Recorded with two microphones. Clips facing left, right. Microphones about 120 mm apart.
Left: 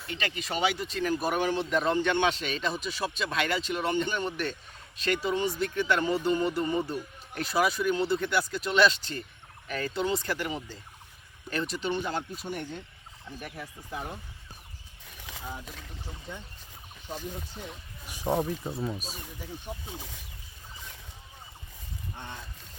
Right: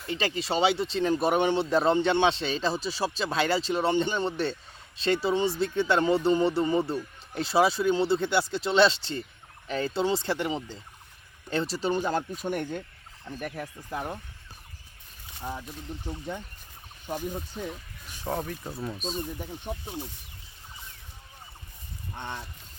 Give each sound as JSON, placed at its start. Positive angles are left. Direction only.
{"t": 0.1, "sound": "speech", "side_deg": -30}
{"t": 15.3, "sound": "speech", "side_deg": 90}
{"t": 18.3, "sound": "speech", "side_deg": 20}
{"t": 18.6, "sound": "speech", "side_deg": 5}